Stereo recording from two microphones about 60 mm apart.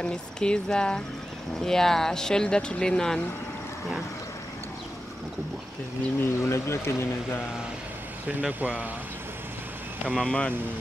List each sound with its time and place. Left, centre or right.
0.0 s speech: centre
6.2 s speech: left
8.3 s speech: right
10.1 s speech: centre